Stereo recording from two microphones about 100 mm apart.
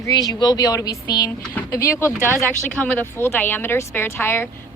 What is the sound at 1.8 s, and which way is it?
Speech, 25° left (ahead or behind).